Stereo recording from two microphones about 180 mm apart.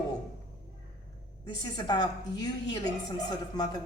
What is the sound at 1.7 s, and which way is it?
A woman's voice, 25° left (ahead or behind).